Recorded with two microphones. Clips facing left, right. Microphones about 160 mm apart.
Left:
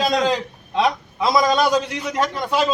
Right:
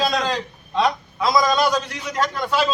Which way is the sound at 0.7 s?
20° left (ahead or behind).